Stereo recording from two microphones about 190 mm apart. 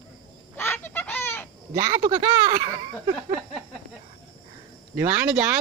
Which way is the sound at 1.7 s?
20° right (ahead or behind).